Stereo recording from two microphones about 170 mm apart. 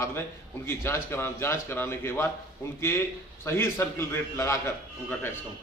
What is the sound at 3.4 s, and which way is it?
A man's voice, 15° left (ahead or behind).